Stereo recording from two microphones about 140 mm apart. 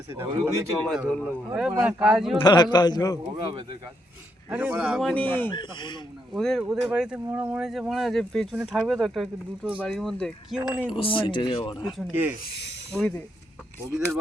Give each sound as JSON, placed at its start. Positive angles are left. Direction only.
{"t": 0.2, "sound": "speech", "side_deg": -15}
{"t": 0.9, "sound": "speech", "side_deg": 5}
{"t": 1.5, "sound": "speech", "side_deg": -5}
{"t": 2.4, "sound": "speech", "side_deg": 35}
{"t": 3.4, "sound": "speech", "side_deg": -35}
{"t": 4.4, "sound": "speech", "side_deg": -10}
{"t": 5.1, "sound": "speech", "side_deg": 15}
{"t": 5.5, "sound": "speech", "side_deg": 35}
{"t": 6.3, "sound": "speech", "side_deg": 0}
{"t": 10.9, "sound": "speech", "side_deg": 40}
{"t": 12.1, "sound": "speech", "side_deg": -10}
{"t": 13.0, "sound": "speech", "side_deg": 10}